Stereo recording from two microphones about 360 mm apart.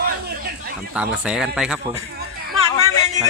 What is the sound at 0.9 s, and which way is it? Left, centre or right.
Speech, centre.